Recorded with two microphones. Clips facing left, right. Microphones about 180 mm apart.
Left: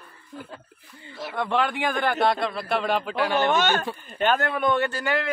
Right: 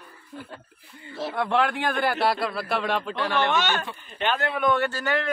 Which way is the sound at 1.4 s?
5° right (ahead or behind).